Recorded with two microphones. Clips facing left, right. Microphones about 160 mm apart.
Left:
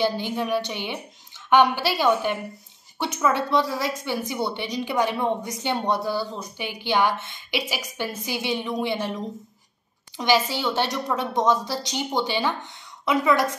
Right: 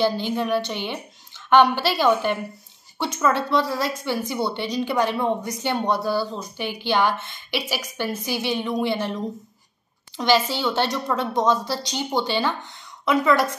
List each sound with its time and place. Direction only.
0.0 s a woman's voice: 15° left (ahead or behind)